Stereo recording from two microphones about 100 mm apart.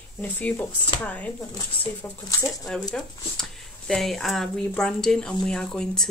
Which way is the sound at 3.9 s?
5° left (ahead or behind).